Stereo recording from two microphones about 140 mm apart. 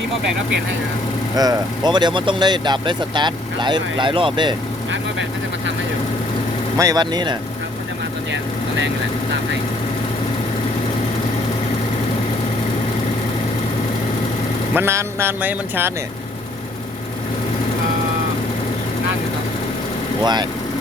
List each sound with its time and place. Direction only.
1.4 s speech: 30° right (ahead or behind)
6.7 s speech: 25° right (ahead or behind)
14.8 s speech: 20° right (ahead or behind)
20.2 s speech: 30° right (ahead or behind)